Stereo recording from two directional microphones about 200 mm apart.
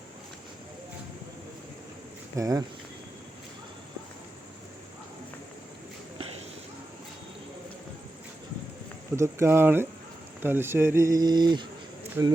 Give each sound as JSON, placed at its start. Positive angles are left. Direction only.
{"t": 2.3, "sound": "speech", "side_deg": -15}
{"t": 9.1, "sound": "speech", "side_deg": -15}
{"t": 12.2, "sound": "speech", "side_deg": -10}